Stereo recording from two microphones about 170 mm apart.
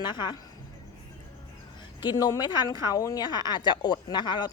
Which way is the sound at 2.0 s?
25° left (ahead or behind).